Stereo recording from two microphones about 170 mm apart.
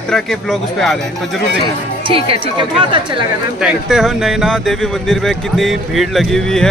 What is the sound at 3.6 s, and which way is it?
Speech, centre (ahead or behind).